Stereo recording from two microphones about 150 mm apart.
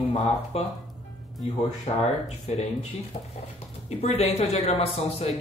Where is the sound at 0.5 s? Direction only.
40° left (ahead or behind).